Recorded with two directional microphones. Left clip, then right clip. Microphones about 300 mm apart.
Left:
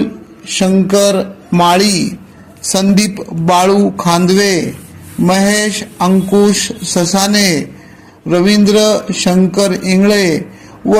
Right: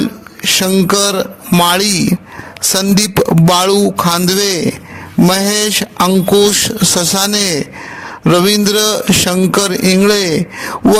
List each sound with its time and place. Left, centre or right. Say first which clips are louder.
0.0 s speech: right 4 dB; right